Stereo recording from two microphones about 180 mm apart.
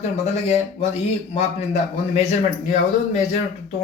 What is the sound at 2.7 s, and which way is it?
Speech, 40° left (ahead or behind).